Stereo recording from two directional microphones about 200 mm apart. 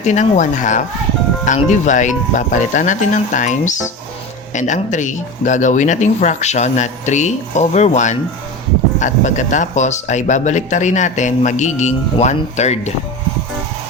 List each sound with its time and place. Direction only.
0.0 s speech: 35° left (ahead or behind)